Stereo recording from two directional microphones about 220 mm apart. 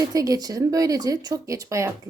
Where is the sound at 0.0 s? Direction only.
15° right (ahead or behind).